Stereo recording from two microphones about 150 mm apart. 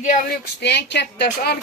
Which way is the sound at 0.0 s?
60° left (ahead or behind).